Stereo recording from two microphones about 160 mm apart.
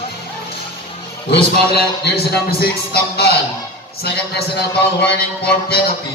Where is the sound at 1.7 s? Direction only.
80° left.